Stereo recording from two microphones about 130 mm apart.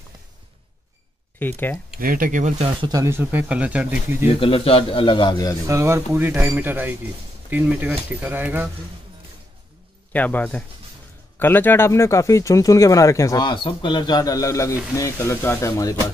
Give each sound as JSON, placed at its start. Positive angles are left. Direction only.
{"t": 1.4, "sound": "speech", "side_deg": 15}
{"t": 2.0, "sound": "speech", "side_deg": -90}
{"t": 2.9, "sound": "speech", "side_deg": -25}
{"t": 4.3, "sound": "a man's voice", "side_deg": 45}
{"t": 5.7, "sound": "speech", "side_deg": -20}
{"t": 10.1, "sound": "speech", "side_deg": 10}